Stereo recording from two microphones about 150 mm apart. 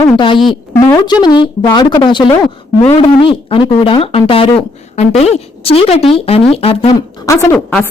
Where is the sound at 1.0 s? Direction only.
30° left (ahead or behind).